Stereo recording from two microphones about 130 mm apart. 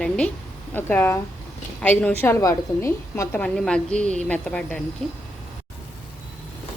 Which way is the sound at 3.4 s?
5° left (ahead or behind).